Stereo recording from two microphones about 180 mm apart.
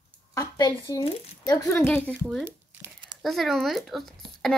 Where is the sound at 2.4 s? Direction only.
15° right (ahead or behind).